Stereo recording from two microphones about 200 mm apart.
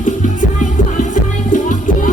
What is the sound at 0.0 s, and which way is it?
Music, 40° left (ahead or behind).